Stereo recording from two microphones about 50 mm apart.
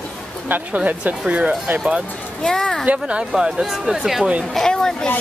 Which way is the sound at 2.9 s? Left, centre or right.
Right.